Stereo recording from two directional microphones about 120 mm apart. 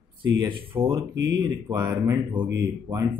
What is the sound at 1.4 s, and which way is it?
Speech, 30° right (ahead or behind).